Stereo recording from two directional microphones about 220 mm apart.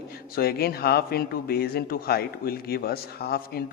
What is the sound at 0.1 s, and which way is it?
Speech, 45° left (ahead or behind).